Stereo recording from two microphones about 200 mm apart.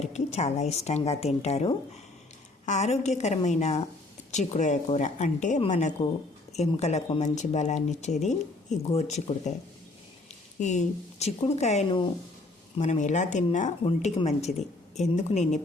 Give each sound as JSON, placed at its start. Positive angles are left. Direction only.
{"t": 0.0, "sound": "speech", "side_deg": 35}
{"t": 10.6, "sound": "speech", "side_deg": 35}